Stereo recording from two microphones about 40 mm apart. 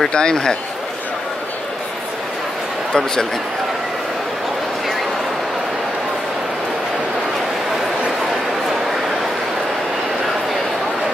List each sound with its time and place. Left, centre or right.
0.1 s speech: centre
2.9 s a man's voice: centre